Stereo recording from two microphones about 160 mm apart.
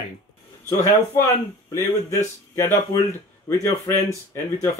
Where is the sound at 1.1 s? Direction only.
20° left (ahead or behind).